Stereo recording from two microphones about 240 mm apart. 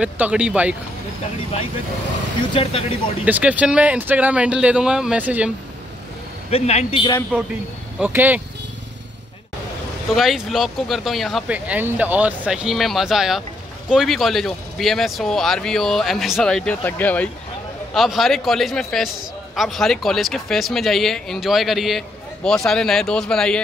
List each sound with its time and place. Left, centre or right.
0.0 s a man's voice: centre
2.5 s a man's voice: left
3.3 s a man's voice: centre
6.5 s a man's voice: left
8.0 s speech: centre
10.1 s a man's voice: centre